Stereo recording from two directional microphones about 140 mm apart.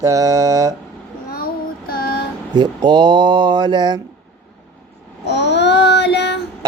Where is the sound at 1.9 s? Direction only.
90° left.